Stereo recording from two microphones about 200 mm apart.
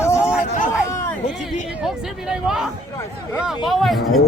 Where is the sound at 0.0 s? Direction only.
15° left (ahead or behind).